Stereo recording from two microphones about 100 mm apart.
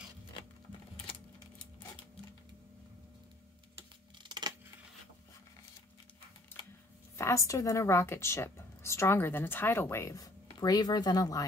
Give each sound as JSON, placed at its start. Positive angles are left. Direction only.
{"t": 4.2, "sound": "scissors", "side_deg": -45}
{"t": 7.2, "sound": "a woman's voice", "side_deg": 30}